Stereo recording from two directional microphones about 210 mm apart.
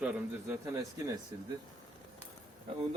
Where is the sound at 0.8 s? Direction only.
15° right (ahead or behind).